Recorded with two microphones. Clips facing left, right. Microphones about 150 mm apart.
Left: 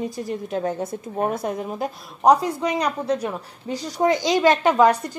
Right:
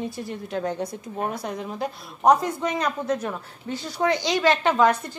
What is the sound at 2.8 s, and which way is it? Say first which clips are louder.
A woman's voice: left 2 dB; 35° left (ahead or behind).